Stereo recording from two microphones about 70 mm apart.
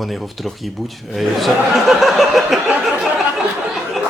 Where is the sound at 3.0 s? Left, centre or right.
Centre.